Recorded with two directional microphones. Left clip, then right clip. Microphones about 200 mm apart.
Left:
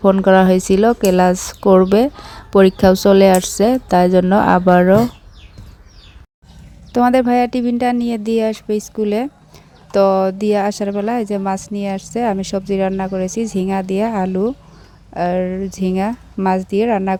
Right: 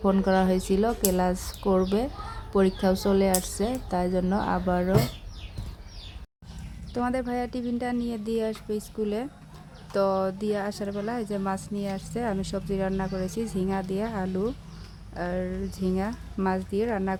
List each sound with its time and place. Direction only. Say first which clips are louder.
0.0 s speech: left 13 dB; 35° left (ahead or behind)
6.9 s speech: left 15 dB; 40° left (ahead or behind)